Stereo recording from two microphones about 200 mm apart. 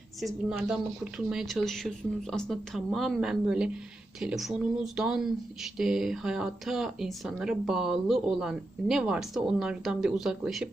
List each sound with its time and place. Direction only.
0.3 s a woman's voice: 10° right (ahead or behind)